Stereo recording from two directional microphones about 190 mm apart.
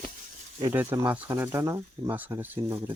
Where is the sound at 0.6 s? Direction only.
10° right (ahead or behind).